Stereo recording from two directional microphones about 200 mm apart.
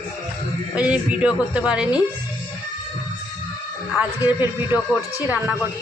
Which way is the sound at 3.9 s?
10° right (ahead or behind).